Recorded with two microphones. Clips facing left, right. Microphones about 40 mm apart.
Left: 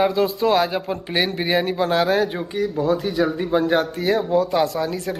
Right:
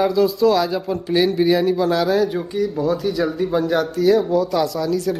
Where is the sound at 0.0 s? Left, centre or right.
Centre.